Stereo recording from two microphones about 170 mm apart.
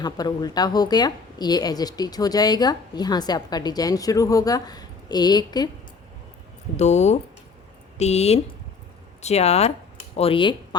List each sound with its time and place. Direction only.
0.0 s a woman's voice: 25° left (ahead or behind)
6.7 s speech: 40° left (ahead or behind)